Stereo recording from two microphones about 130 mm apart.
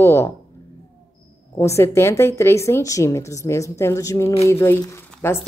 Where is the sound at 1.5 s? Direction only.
20° left (ahead or behind).